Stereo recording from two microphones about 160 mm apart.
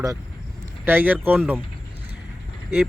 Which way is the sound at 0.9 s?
10° right (ahead or behind).